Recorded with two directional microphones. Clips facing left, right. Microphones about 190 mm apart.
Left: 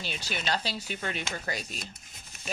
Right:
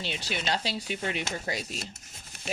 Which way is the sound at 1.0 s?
10° right (ahead or behind).